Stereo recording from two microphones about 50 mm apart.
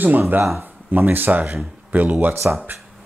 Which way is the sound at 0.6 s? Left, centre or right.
Right.